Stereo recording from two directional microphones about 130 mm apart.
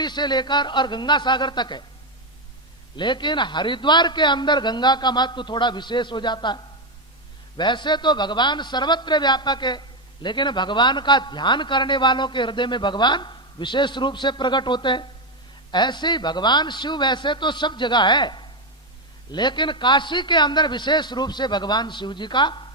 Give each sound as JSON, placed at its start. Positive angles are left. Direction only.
{"t": 0.0, "sound": "a man's voice", "side_deg": 35}
{"t": 2.9, "sound": "a man's voice", "side_deg": 35}